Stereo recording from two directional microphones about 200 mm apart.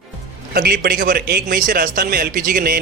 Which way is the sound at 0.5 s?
50° right (ahead or behind).